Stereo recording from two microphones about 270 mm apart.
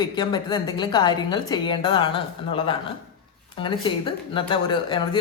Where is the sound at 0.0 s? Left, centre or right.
Centre.